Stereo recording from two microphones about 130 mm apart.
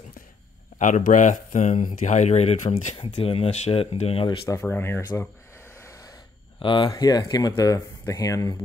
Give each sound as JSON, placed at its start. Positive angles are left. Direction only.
{"t": 0.7, "sound": "speech", "side_deg": 75}
{"t": 3.0, "sound": "speech", "side_deg": 45}
{"t": 4.5, "sound": "speech", "side_deg": 15}
{"t": 5.9, "sound": "gasp", "side_deg": 25}
{"t": 6.6, "sound": "speech", "side_deg": 40}